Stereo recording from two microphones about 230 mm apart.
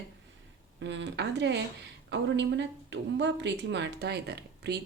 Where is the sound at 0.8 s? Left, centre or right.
Right.